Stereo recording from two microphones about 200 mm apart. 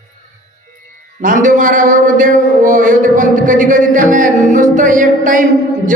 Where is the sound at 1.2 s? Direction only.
40° right (ahead or behind).